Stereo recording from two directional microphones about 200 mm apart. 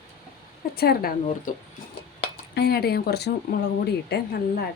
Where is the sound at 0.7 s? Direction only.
50° left (ahead or behind).